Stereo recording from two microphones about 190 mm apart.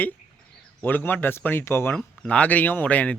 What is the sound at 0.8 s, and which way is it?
Speech, 10° left (ahead or behind).